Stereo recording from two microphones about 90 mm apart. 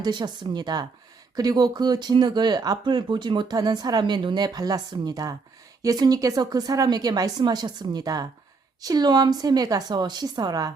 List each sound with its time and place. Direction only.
0.0 s speech: 55° right (ahead or behind)